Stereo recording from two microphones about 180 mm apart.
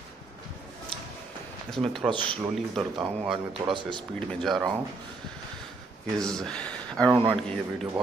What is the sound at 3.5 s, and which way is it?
Speech, 25° right (ahead or behind).